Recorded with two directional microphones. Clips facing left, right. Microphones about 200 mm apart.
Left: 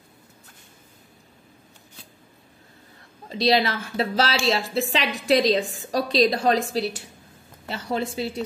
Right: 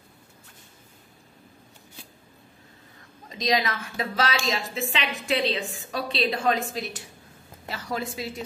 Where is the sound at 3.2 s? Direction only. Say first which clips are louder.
Left 5 dB; 30° left (ahead or behind).